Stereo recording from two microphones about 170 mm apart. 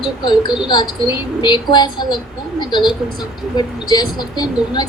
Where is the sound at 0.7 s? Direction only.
25° left (ahead or behind).